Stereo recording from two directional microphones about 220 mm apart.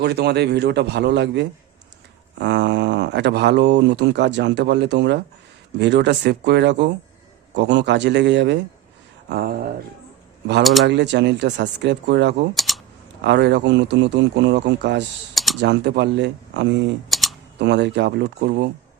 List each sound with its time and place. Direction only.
0.0 s speech: 50° right (ahead or behind)
9.3 s speech: 40° right (ahead or behind)
10.6 s speech: centre (ahead or behind)
10.8 s speech: 50° right (ahead or behind)
12.5 s typing: centre (ahead or behind)
13.2 s speech: 50° right (ahead or behind)
17.1 s typing: centre (ahead or behind)
17.6 s speech: 50° right (ahead or behind)